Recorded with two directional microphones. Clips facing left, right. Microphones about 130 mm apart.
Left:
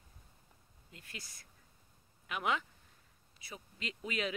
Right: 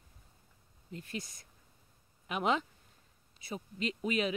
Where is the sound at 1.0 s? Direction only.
20° right (ahead or behind).